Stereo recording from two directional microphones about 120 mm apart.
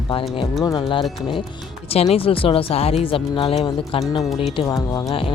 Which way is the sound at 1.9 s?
55° left (ahead or behind).